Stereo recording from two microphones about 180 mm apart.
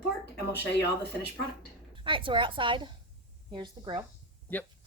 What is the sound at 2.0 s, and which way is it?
A woman's voice, 30° right (ahead or behind).